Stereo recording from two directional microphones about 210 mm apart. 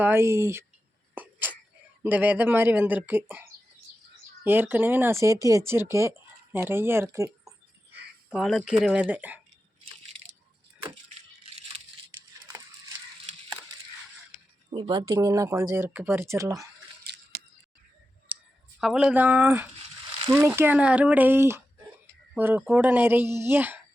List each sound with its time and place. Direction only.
0.0 s speech: 10° right (ahead or behind)
1.1 s a sound: 10° right (ahead or behind)
2.0 s speech: 10° right (ahead or behind)
8.3 s speech: centre (ahead or behind)
12.5 s a sound: 15° right (ahead or behind)
14.7 s speech: 25° right (ahead or behind)
18.3 s clicking: 5° right (ahead or behind)
18.8 s speech: 5° right (ahead or behind)